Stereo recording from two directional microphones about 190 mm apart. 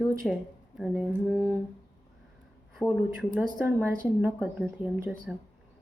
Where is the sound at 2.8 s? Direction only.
5° right (ahead or behind).